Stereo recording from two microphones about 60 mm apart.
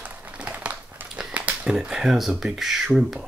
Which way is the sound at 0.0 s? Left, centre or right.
Right.